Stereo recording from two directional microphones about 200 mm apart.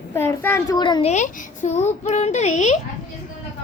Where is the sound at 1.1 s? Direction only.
35° left (ahead or behind).